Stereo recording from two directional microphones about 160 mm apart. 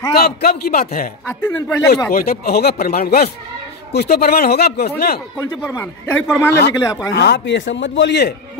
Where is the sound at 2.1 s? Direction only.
65° left (ahead or behind).